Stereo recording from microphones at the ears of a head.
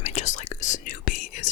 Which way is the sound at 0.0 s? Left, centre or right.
Left.